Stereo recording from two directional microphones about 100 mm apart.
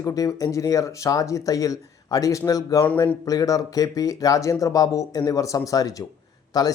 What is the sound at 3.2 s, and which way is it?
Speech, 35° left (ahead or behind).